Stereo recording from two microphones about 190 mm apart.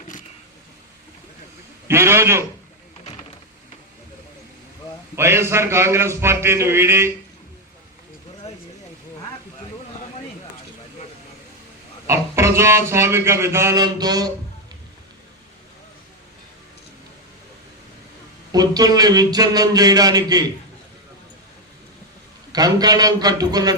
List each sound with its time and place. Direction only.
1.9 s music: 15° right (ahead or behind)
5.1 s music: 15° right (ahead or behind)
12.0 s music: 15° right (ahead or behind)
18.5 s speech: 20° right (ahead or behind)
22.5 s speech: 20° right (ahead or behind)